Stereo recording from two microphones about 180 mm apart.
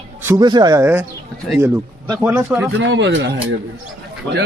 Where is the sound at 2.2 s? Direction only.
5° right (ahead or behind).